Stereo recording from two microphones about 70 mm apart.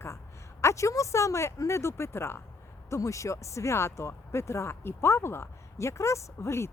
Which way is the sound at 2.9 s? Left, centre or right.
Left.